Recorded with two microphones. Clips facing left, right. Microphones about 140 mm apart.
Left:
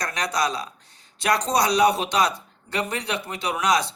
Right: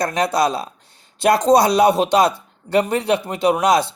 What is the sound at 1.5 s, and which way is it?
Speech, 50° right (ahead or behind).